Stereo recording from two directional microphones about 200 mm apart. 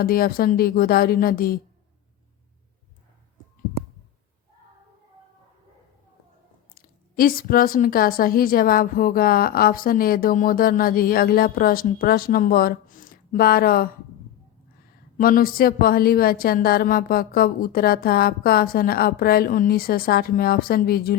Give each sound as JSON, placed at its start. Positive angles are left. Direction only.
{"t": 0.0, "sound": "a woman's voice", "side_deg": 50}
{"t": 6.7, "sound": "a woman's voice", "side_deg": 45}
{"t": 15.2, "sound": "a woman's voice", "side_deg": 45}